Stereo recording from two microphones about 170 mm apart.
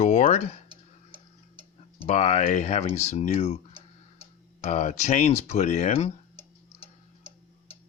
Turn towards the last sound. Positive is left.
turn(degrees=40)  # may be behind; listen again after turning